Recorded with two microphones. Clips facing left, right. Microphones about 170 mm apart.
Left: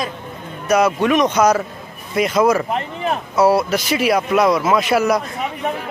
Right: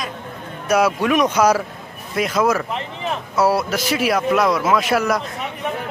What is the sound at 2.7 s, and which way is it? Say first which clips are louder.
Speech: left 4 dB; 50° left (ahead or behind).